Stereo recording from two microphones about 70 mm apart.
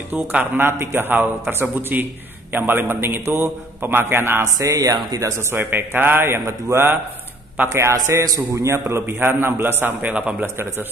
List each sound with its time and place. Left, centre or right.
0.3 s a man's voice: right
4.6 s speech: right
5.5 s a man's voice: right
7.7 s a man's voice: right
8.9 s a man's voice: right